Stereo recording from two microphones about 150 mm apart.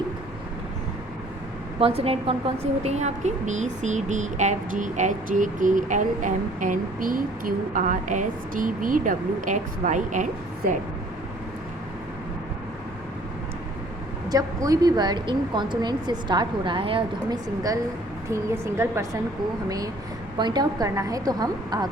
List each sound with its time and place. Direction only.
1.8 s a woman's voice: 40° right (ahead or behind); by 10.2 s 55° right (ahead or behind)
14.3 s a woman's voice: 25° right (ahead or behind)
18.3 s a woman's voice: 20° right (ahead or behind)